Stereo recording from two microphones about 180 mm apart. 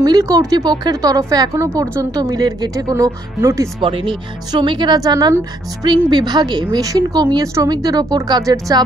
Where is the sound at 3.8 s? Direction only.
30° right (ahead or behind).